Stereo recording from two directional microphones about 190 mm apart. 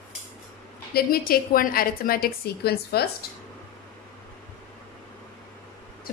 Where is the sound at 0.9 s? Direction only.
50° left (ahead or behind).